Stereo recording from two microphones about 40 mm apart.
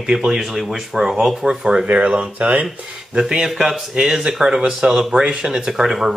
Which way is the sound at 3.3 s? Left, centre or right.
Centre.